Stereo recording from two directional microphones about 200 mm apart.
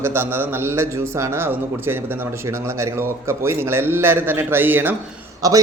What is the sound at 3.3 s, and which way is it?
A man's voice, 10° right (ahead or behind).